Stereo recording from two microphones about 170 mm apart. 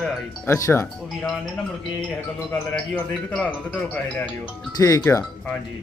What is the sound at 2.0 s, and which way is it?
A man's voice, 10° left (ahead or behind).